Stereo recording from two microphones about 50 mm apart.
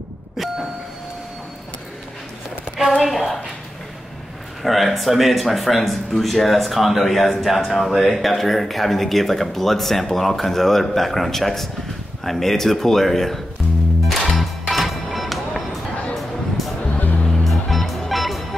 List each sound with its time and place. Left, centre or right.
2.8 s a woman's voice: centre
4.6 s speech: centre
14.0 s music: centre
17.0 s music: left
17.3 s music: centre